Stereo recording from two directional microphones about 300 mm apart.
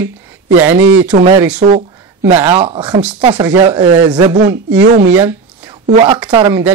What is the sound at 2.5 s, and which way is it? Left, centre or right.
Speech, centre.